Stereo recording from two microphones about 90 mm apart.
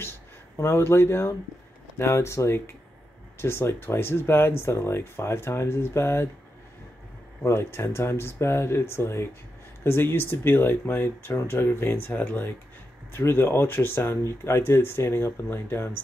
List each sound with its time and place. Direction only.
0.6 s speech: 30° left (ahead or behind)
7.4 s speech: 30° left (ahead or behind)